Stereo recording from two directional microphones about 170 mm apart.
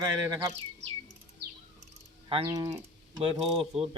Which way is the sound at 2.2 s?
25° right (ahead or behind).